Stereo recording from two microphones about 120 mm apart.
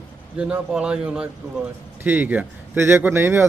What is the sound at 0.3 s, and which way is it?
A man's voice, 10° right (ahead or behind).